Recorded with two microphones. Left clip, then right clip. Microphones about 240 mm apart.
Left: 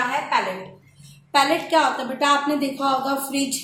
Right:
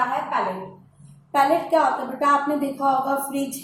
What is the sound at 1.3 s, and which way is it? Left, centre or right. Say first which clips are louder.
A woman's voice: even; left.